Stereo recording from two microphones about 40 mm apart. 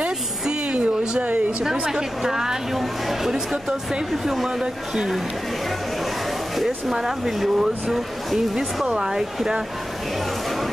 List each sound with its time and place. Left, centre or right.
0.0 s a sound: right
1.6 s a woman's voice: centre
6.6 s speech: centre
8.8 s a woman's voice: centre